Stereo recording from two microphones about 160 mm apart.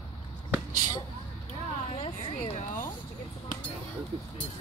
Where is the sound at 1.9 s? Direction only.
40° left (ahead or behind).